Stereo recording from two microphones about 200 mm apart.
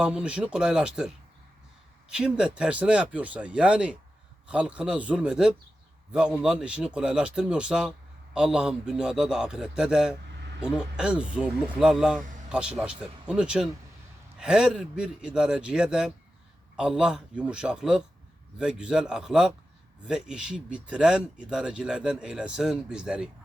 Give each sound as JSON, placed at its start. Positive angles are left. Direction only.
{"t": 0.0, "sound": "a man's voice", "side_deg": -5}